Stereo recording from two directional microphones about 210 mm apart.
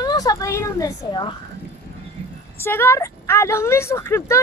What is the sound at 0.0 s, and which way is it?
Speech, 15° left (ahead or behind).